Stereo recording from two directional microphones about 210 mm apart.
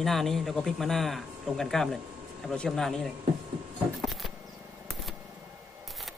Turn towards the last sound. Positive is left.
turn(degrees=0)  # may be behind; listen again after turning